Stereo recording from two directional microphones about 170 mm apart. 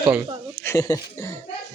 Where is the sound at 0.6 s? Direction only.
20° left (ahead or behind).